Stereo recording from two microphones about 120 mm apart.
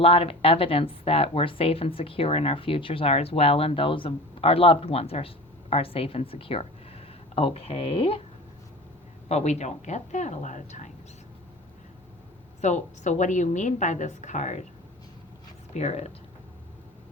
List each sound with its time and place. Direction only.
0.0 s a woman's voice: 55° left (ahead or behind)
9.3 s a woman's voice: 70° left (ahead or behind); by 10.9 s 90° left
12.6 s a woman's voice: 80° left
15.7 s a woman's voice: 70° left (ahead or behind)